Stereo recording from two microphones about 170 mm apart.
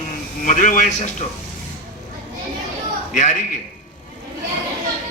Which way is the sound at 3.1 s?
45° left (ahead or behind).